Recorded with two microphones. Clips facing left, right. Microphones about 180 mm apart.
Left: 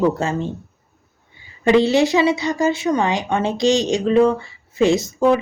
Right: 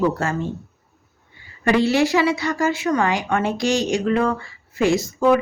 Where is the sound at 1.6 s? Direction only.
20° left (ahead or behind).